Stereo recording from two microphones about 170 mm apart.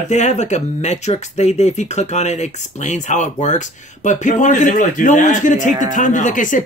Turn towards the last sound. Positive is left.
turn(degrees=50)  # may be behind; listen again after turning